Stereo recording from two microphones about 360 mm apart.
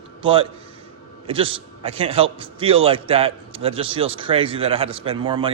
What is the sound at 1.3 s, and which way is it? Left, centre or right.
A man's voice, centre.